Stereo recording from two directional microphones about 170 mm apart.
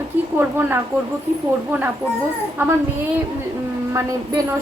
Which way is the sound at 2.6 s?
15° right (ahead or behind).